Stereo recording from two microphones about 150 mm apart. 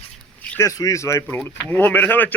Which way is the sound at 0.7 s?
20° left (ahead or behind).